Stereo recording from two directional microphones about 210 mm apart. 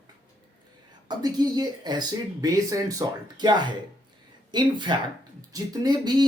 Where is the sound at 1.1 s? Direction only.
20° right (ahead or behind).